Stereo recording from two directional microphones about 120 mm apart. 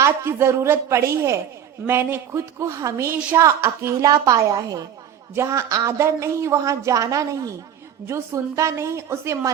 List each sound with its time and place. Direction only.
0.0 s a woman's voice: 20° right (ahead or behind)